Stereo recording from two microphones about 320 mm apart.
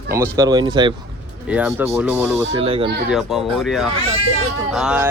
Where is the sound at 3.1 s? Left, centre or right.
Centre.